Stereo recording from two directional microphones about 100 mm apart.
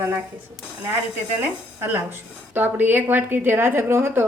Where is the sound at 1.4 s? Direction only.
20° right (ahead or behind).